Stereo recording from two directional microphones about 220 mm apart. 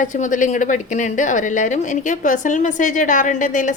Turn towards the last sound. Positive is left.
turn(degrees=35)  # may be behind; listen again after turning